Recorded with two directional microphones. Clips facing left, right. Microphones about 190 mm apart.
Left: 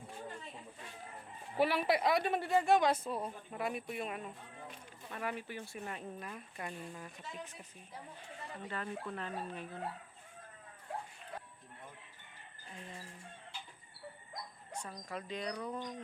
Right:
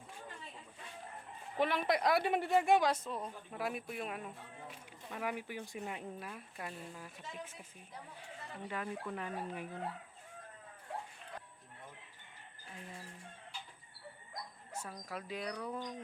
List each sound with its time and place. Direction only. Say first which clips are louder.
1.5 s speech: left 2 dB; 5° left (ahead or behind)
2.2 s speech: even; 15° right (ahead or behind)
3.1 s speech: left 3 dB; 10° left (ahead or behind)
5.1 s speech: right 1 dB; 10° right (ahead or behind)
8.6 s speech: right 1 dB; 10° right (ahead or behind)
14.7 s speech: left 1 dB; 5° right (ahead or behind)